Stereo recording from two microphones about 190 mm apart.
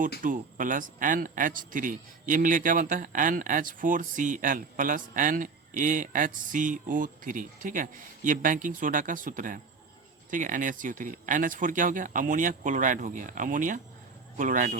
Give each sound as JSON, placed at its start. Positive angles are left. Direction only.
{"t": 0.2, "sound": "speech", "side_deg": -45}